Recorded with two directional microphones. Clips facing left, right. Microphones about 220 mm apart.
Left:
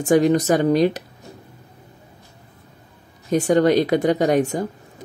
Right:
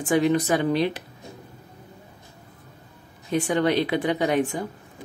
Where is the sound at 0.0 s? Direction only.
40° left (ahead or behind).